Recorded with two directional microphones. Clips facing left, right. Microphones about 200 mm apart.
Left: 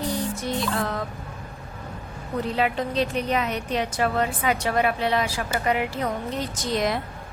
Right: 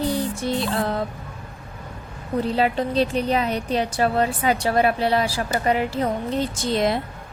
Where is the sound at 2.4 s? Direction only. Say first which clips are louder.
Right 3 dB; 30° right (ahead or behind).